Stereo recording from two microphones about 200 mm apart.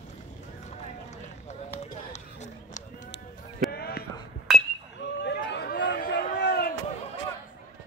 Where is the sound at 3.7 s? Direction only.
50° left (ahead or behind).